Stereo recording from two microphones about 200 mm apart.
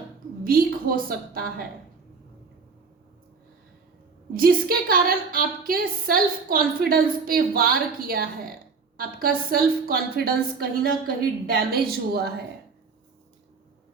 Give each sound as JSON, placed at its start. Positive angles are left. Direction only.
{"t": 0.4, "sound": "a woman's voice", "side_deg": -45}
{"t": 4.4, "sound": "a woman's voice", "side_deg": -45}